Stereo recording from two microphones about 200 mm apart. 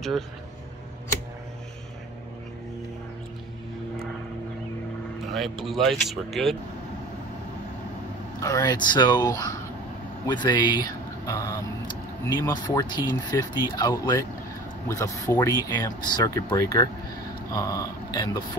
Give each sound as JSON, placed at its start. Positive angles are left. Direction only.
{"t": 5.3, "sound": "speech", "side_deg": 0}
{"t": 8.4, "sound": "speech", "side_deg": 15}